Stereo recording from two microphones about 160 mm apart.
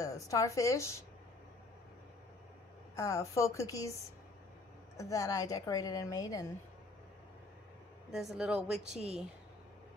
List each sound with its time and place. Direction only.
0.0 s a woman's voice: 20° left (ahead or behind)
3.0 s a woman's voice: 20° left (ahead or behind)
4.9 s a woman's voice: 20° left (ahead or behind)
8.1 s a woman's voice: centre (ahead or behind)